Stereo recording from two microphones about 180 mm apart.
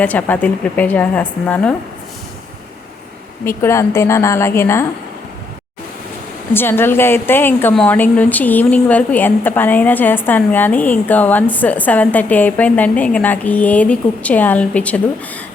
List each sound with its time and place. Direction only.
0.0 s a woman's voice: 10° left (ahead or behind)
3.4 s a woman's voice: 15° left (ahead or behind)
6.5 s a woman's voice: 10° left (ahead or behind)